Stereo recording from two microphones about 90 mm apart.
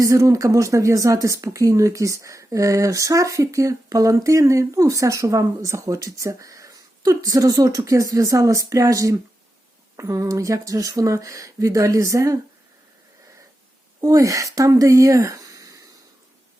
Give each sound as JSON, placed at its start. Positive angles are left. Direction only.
{"t": 0.0, "sound": "speech", "side_deg": -35}
{"t": 14.0, "sound": "speech", "side_deg": -40}